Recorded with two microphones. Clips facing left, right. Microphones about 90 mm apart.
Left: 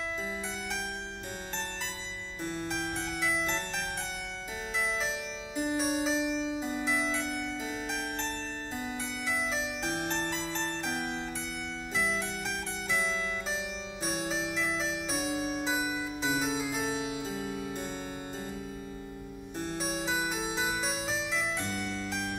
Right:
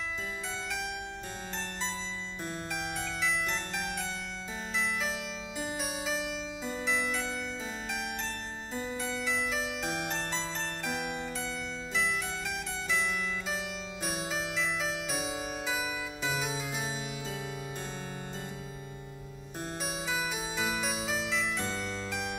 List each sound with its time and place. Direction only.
5.7 s music: 30° left (ahead or behind)
8.9 s harpsichord: 15° left (ahead or behind)
9.5 s music: centre (ahead or behind)
14.5 s harpsichord: centre (ahead or behind)
15.6 s music: 30° left (ahead or behind)
16.4 s harpsichord: centre (ahead or behind)
20.1 s music: 25° left (ahead or behind)